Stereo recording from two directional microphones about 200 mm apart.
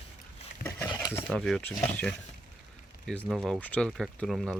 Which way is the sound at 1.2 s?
Centre (ahead or behind).